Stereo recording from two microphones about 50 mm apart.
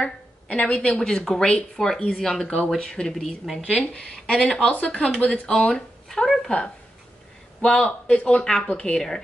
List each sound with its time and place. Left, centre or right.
0.0 s speech: centre
3.7 s speech: left
4.0 s speech: centre
4.4 s speech: left
6.0 s a sound: centre
7.6 s speech: centre
8.9 s speech: centre